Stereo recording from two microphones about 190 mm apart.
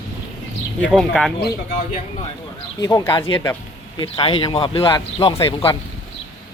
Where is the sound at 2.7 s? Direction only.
20° left (ahead or behind).